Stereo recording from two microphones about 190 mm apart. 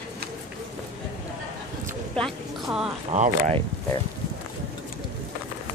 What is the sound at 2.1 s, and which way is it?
Music, centre (ahead or behind).